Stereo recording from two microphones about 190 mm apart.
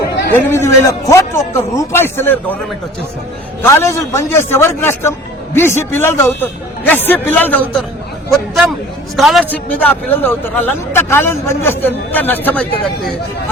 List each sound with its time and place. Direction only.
0.3 s a man's voice: 15° left (ahead or behind)
3.6 s a man's voice: 15° left (ahead or behind)
9.1 s a man's voice: centre (ahead or behind)